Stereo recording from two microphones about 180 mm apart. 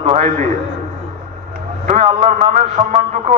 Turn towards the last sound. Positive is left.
turn(degrees=-40)  # may be behind; listen again after turning